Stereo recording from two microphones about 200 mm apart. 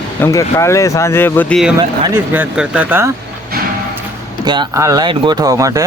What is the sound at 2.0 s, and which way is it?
Speech, 10° right (ahead or behind).